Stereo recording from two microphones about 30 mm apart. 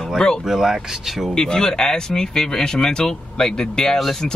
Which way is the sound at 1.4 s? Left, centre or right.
Left.